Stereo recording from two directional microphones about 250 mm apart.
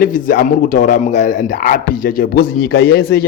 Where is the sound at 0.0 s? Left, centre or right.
Left.